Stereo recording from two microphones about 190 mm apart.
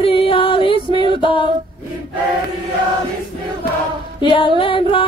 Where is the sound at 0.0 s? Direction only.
30° left (ahead or behind).